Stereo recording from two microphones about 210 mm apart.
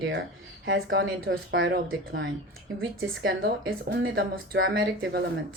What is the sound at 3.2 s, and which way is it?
Speech, 45° right (ahead or behind).